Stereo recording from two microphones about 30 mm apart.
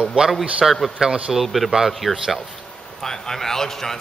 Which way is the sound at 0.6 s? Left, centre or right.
Centre.